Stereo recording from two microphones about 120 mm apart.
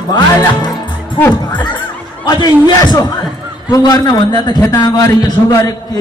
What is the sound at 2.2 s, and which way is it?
A man's voice, 30° left (ahead or behind).